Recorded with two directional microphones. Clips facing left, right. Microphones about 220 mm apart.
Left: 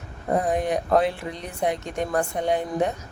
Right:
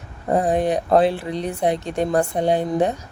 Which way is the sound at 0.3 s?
30° right (ahead or behind).